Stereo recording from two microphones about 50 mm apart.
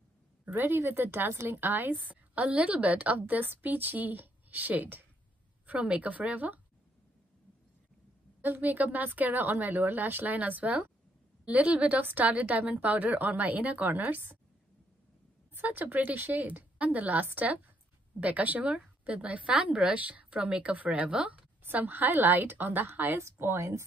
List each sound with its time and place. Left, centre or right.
0.5 s a woman's voice: right
8.4 s a woman's voice: right
15.6 s a woman's voice: right; by 20.0 s centre
20.0 s a woman's voice: right
21.7 s a woman's voice: right